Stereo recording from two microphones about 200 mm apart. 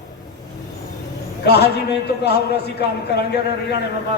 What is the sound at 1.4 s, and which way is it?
Speech, 55° left (ahead or behind).